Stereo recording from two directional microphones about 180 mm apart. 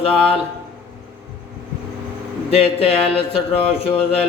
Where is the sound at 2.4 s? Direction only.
35° left (ahead or behind).